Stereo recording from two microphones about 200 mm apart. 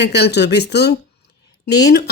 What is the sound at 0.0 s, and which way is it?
Speech, 55° left (ahead or behind).